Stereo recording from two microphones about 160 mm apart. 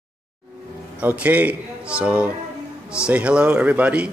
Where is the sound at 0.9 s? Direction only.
10° right (ahead or behind).